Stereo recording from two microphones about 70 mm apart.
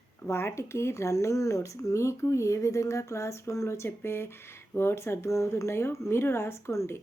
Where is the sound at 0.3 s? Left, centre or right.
Left.